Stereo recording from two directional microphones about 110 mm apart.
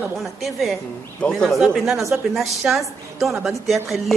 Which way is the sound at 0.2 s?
Centre (ahead or behind).